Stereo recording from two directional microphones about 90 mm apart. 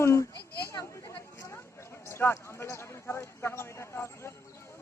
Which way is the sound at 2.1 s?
25° left (ahead or behind).